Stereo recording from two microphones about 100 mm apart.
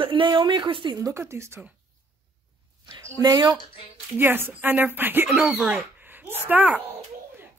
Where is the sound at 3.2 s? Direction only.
40° right (ahead or behind).